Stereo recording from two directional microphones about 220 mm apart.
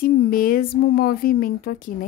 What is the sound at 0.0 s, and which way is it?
A woman's voice, 40° left (ahead or behind).